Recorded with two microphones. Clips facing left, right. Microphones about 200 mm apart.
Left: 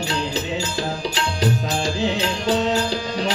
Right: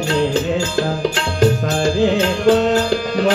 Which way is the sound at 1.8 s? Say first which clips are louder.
Right 10 dB; 50° right (ahead or behind).